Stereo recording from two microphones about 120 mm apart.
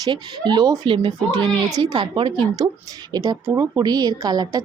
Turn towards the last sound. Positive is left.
turn(degrees=-30)  # may be behind; listen again after turning